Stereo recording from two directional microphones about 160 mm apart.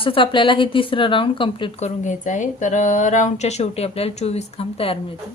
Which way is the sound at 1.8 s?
50° left (ahead or behind).